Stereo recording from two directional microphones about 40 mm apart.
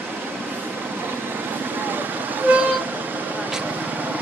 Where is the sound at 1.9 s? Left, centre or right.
Right.